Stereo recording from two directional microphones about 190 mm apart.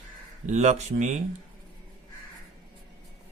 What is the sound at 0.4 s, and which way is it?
Speech, 35° right (ahead or behind).